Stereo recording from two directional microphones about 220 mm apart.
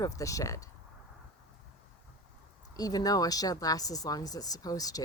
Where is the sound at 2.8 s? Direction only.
15° left (ahead or behind).